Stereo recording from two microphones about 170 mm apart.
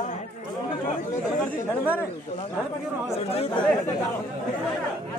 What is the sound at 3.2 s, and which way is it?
Speech, 35° left (ahead or behind).